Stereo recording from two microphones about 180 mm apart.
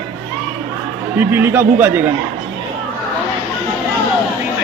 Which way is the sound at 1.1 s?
10° right (ahead or behind).